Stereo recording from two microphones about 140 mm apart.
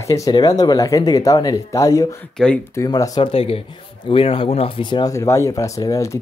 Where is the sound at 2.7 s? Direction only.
25° left (ahead or behind).